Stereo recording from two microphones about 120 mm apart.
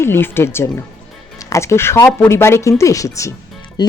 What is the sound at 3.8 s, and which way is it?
Speech, 40° left (ahead or behind).